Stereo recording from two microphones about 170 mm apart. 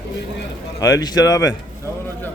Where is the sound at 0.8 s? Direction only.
20° left (ahead or behind).